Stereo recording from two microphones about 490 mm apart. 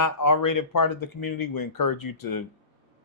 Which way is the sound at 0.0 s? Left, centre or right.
Left.